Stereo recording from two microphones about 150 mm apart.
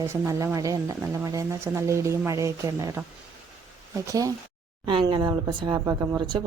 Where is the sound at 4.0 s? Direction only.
20° right (ahead or behind).